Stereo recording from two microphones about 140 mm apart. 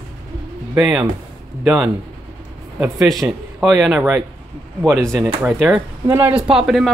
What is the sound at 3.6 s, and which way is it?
A woman's voice, 5° right (ahead or behind).